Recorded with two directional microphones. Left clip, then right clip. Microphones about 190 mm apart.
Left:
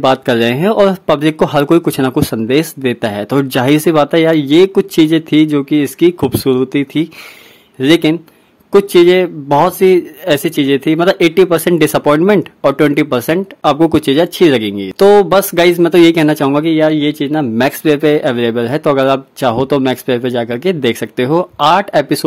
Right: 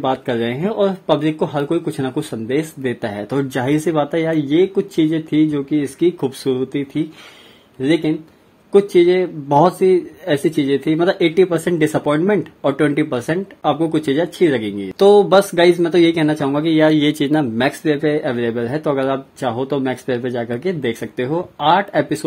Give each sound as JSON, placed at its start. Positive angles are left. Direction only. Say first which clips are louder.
{"t": 0.0, "sound": "speech", "louder": "left 8 dB", "side_deg": 25}